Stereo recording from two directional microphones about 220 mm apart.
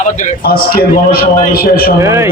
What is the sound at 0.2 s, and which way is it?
A man's voice, 45° left (ahead or behind).